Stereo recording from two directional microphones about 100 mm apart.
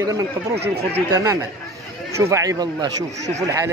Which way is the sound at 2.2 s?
30° right (ahead or behind).